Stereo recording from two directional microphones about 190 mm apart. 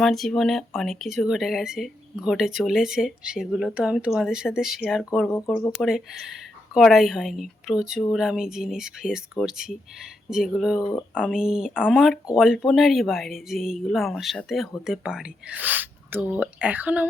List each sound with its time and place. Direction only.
0.0 s speech: centre (ahead or behind)
5.3 s speech: 10° left (ahead or behind); by 17.1 s 10° right (ahead or behind)